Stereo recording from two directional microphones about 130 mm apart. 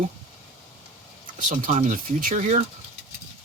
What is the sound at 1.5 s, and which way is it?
Speech, 75° right (ahead or behind).